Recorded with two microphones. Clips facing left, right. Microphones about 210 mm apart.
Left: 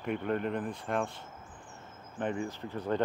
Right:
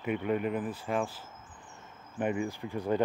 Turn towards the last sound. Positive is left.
turn(degrees=-10)  # may be behind; listen again after turning